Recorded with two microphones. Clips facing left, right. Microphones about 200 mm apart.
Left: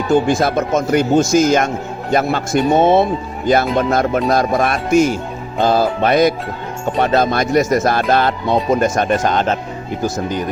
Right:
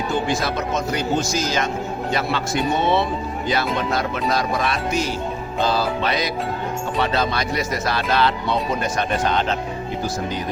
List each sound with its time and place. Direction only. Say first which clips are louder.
0.1 s a man's voice: left 11 dB; 50° left (ahead or behind)